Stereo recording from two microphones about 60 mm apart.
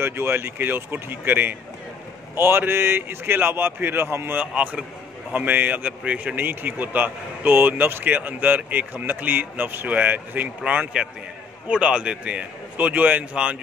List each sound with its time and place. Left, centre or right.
0.0 s speech: right
4.4 s a man's voice: right